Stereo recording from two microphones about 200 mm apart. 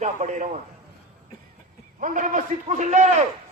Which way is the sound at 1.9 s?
40° right (ahead or behind).